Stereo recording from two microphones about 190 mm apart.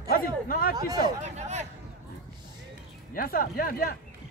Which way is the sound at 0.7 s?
20° right (ahead or behind).